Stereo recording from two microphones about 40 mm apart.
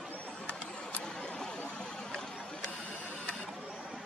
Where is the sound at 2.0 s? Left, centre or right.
Left.